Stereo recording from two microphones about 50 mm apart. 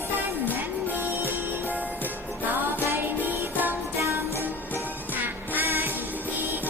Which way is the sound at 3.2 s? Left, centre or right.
Right.